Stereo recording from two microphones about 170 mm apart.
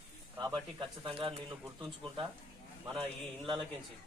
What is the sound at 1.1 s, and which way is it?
Speech, 35° right (ahead or behind).